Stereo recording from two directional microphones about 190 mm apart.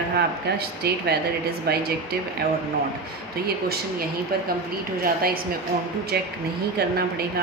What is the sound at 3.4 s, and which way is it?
A woman's voice, 55° right (ahead or behind).